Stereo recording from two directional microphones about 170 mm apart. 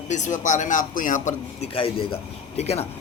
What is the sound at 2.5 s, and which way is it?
Speech, 40° left (ahead or behind).